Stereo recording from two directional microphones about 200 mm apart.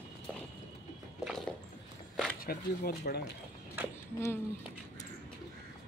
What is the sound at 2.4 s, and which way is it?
Speech, 50° left (ahead or behind).